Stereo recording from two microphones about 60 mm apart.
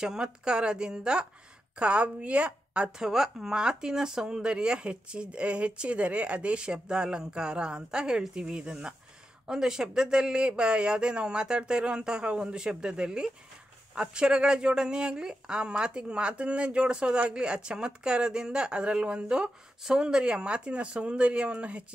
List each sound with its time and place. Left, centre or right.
0.0 s a woman's voice: centre
3.0 s speech: centre